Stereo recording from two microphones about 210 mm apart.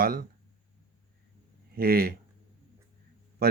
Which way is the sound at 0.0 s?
45° right (ahead or behind).